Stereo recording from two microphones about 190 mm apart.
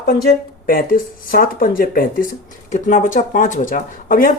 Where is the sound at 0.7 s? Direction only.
50° left (ahead or behind).